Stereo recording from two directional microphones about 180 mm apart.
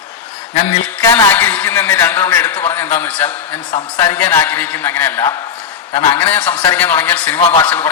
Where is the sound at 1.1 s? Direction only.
10° left (ahead or behind).